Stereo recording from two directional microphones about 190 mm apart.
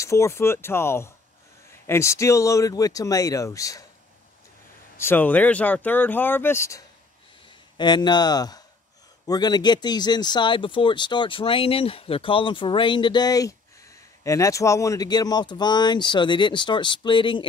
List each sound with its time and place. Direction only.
0.0 s speech: 15° left (ahead or behind)
4.9 s speech: 10° left (ahead or behind)